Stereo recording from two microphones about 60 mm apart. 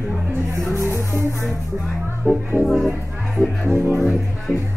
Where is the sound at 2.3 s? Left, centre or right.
Right.